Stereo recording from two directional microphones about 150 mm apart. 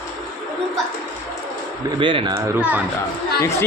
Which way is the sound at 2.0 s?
35° right (ahead or behind).